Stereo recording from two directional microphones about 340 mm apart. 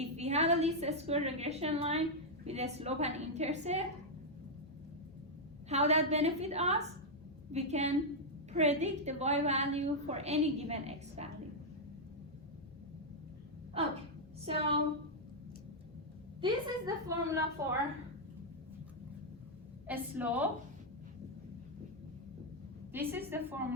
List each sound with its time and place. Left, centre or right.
0.0 s a woman's voice: centre
5.6 s a woman's voice: centre
14.4 s a woman's voice: centre
16.4 s a woman's voice: centre
19.9 s a woman's voice: centre
22.9 s a woman's voice: centre